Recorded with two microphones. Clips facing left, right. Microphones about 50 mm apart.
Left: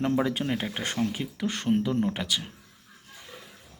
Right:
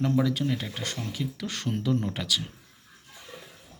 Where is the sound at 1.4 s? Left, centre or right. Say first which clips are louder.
Left 5 dB; centre.